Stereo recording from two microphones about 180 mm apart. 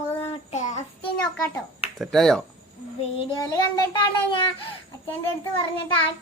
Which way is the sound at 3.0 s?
30° left (ahead or behind).